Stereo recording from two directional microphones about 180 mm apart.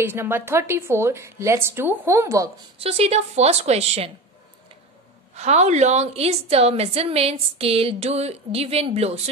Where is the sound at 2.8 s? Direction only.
35° right (ahead or behind).